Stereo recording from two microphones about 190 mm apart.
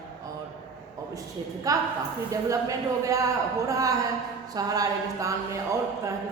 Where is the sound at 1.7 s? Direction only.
20° right (ahead or behind).